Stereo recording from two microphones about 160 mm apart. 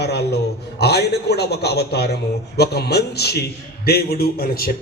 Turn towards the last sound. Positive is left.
turn(degrees=70)  # may be behind; listen again after turning